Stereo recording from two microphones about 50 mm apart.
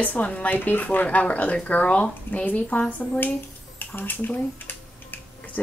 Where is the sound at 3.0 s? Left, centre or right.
Left.